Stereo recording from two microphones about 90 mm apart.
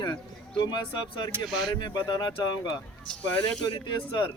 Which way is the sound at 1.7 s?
55° left (ahead or behind).